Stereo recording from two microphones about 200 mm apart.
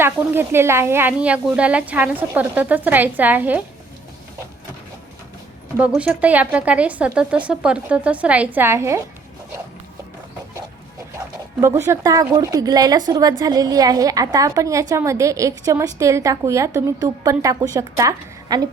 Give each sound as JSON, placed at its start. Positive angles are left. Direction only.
{"t": 0.0, "sound": "a woman's voice", "side_deg": -10}
{"t": 5.7, "sound": "a woman's voice", "side_deg": -5}
{"t": 11.6, "sound": "a woman's voice", "side_deg": -15}